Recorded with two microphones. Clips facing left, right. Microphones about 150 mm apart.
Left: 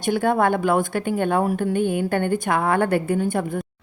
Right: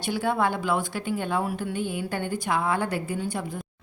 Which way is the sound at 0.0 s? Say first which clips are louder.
Left 6 dB; 50° left (ahead or behind).